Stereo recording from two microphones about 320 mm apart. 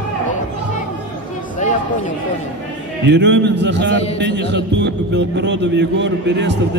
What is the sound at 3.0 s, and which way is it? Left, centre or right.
Speech, right.